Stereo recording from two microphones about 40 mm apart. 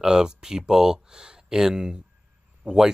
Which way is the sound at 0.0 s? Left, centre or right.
Centre.